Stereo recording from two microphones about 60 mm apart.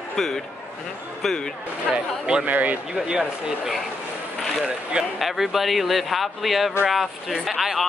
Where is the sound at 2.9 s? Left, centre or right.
Centre.